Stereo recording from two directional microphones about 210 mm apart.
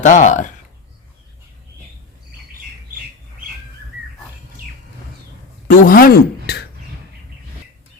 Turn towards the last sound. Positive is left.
turn(degrees=50)  # may be behind; listen again after turning